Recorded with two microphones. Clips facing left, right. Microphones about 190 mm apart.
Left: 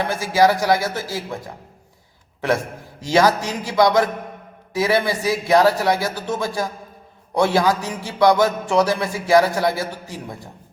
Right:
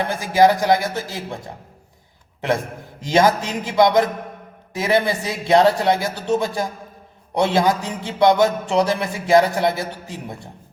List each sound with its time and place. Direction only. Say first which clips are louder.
0.0 s speech: right 1 dB; 15° right (ahead or behind)
3.0 s speech: even; 20° right (ahead or behind)